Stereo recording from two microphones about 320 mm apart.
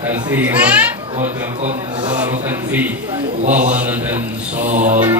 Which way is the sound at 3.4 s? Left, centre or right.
Right.